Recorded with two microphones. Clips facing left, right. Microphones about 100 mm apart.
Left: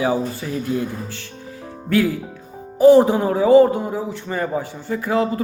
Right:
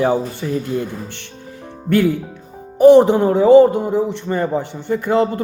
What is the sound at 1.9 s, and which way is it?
Speech, 65° right (ahead or behind).